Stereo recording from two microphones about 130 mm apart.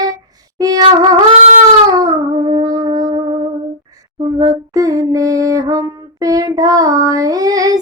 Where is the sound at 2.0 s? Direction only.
35° right (ahead or behind).